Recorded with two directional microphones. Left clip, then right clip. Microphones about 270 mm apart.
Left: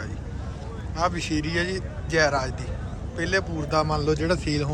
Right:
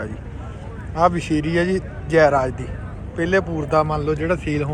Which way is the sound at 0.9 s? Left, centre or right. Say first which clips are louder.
Right 8 dB; centre.